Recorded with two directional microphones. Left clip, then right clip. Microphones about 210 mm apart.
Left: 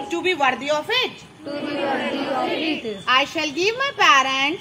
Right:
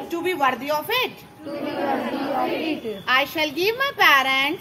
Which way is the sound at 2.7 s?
40° left (ahead or behind).